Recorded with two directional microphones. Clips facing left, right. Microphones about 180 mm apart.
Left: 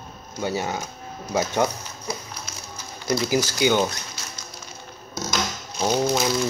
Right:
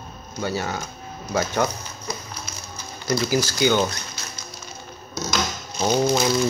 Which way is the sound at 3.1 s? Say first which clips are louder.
Even; 20° left (ahead or behind).